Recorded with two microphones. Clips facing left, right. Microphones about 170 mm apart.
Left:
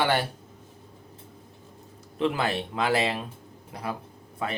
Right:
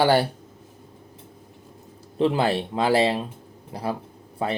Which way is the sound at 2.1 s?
30° right (ahead or behind).